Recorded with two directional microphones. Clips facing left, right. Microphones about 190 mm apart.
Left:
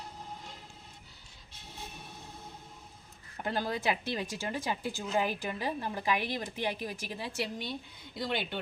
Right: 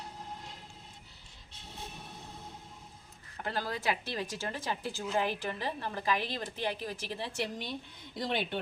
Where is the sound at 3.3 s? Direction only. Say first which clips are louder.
Left 3 dB; 20° left (ahead or behind); by 8.6 s centre (ahead or behind).